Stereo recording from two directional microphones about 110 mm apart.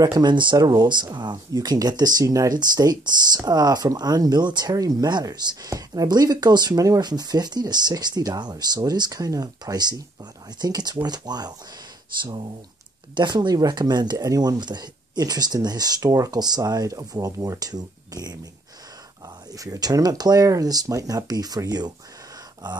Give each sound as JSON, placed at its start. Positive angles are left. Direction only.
{"t": 0.0, "sound": "speech", "side_deg": -40}
{"t": 19.5, "sound": "speech", "side_deg": -35}